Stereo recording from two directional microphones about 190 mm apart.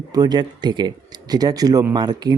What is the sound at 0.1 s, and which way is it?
Speech, 20° right (ahead or behind).